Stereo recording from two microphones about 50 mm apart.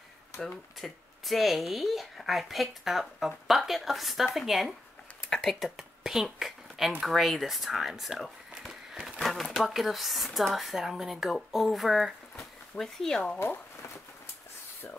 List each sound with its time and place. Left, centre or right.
0.7 s speech: centre
5.3 s speech: centre
5.6 s a sound: centre
7.0 s speech: centre
9.2 s speech: centre
12.4 s speech: centre